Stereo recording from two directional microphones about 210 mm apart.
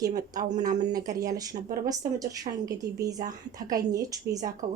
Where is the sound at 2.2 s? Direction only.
15° right (ahead or behind).